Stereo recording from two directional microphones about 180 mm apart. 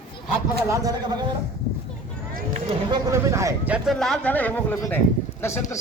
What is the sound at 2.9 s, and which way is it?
A man's voice, 20° right (ahead or behind).